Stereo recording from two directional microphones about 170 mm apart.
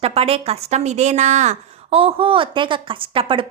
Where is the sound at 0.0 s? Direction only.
35° right (ahead or behind).